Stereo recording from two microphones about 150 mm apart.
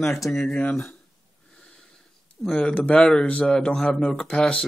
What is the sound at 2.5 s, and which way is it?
Speech, 10° left (ahead or behind).